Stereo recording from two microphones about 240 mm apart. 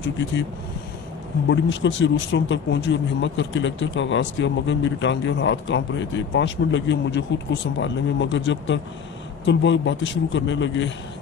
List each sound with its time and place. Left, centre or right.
1.5 s speech: left